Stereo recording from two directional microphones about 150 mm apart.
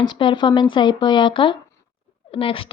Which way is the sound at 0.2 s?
30° left (ahead or behind).